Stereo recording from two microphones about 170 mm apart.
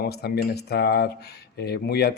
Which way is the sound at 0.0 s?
70° left (ahead or behind).